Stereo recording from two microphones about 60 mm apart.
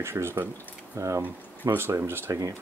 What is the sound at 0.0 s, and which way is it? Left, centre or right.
Speech, right.